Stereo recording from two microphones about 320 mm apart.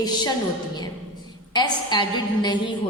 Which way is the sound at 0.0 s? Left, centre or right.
Centre.